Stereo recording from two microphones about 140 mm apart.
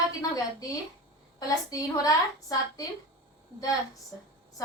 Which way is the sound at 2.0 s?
25° left (ahead or behind).